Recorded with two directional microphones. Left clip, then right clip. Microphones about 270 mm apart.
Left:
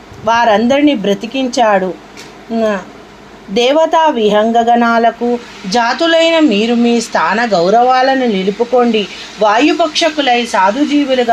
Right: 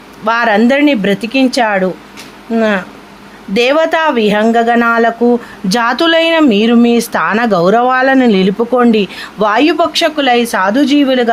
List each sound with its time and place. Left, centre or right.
0.3 s speech: right
5.6 s speech: right
7.6 s speech: right
7.9 s a woman's voice: right